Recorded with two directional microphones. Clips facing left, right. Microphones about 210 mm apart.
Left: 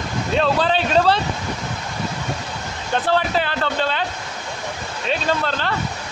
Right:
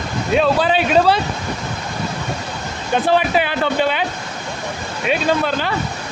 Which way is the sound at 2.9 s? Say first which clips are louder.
Right 4 dB; 15° right (ahead or behind).